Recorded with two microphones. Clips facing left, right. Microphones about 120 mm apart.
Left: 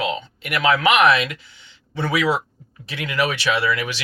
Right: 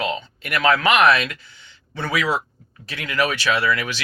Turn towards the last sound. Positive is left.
turn(degrees=15)  # may be behind; listen again after turning